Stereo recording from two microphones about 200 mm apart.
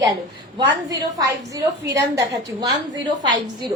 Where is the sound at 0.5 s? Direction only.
20° right (ahead or behind).